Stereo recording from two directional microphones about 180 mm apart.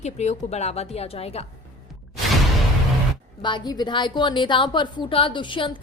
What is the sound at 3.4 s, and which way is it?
A woman's voice, 25° left (ahead or behind).